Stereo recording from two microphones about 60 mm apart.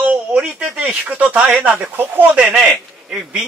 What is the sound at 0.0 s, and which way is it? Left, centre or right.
Speech, centre.